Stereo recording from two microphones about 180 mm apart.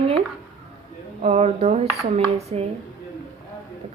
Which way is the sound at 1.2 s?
35° right (ahead or behind).